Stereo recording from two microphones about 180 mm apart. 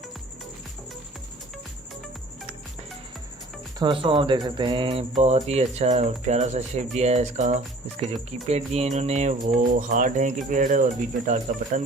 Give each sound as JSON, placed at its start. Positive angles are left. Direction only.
{"t": 3.8, "sound": "speech", "side_deg": -30}